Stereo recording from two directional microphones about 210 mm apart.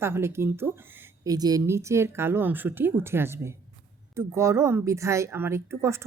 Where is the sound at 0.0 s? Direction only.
10° right (ahead or behind).